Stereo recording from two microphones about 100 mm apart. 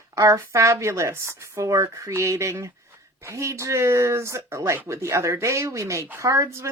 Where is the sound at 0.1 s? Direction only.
30° right (ahead or behind).